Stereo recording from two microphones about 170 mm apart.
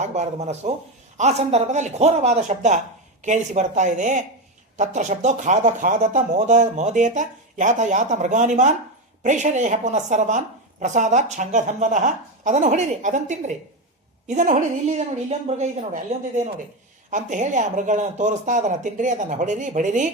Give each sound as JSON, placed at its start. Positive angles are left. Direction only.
{"t": 0.0, "sound": "a woman's voice", "side_deg": -40}